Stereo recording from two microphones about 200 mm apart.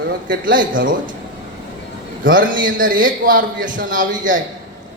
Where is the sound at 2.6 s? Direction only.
45° right (ahead or behind).